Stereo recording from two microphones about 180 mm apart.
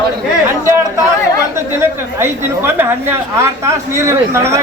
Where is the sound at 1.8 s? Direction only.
15° right (ahead or behind).